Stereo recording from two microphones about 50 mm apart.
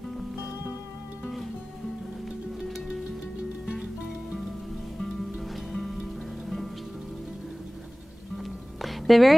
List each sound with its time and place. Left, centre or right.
3.6 s music: centre
5.7 s music: centre
8.8 s music: centre